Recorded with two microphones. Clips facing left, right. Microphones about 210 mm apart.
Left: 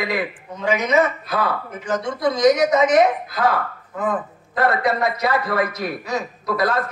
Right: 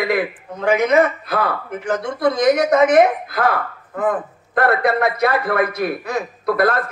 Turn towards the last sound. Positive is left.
turn(degrees=-55)  # may be behind; listen again after turning